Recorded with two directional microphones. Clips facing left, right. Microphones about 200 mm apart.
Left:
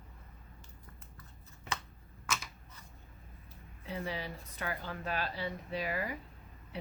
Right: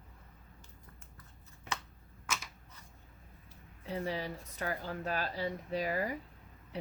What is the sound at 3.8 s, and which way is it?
Speech, 40° right (ahead or behind).